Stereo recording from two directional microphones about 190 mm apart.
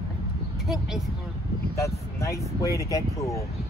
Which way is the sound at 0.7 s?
Centre (ahead or behind).